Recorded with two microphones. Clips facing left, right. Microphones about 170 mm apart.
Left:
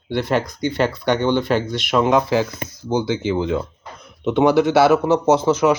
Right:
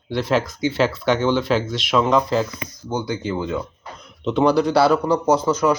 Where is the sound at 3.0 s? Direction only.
90° left.